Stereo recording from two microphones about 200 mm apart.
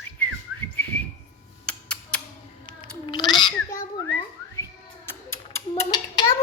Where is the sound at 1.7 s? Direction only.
5° left (ahead or behind).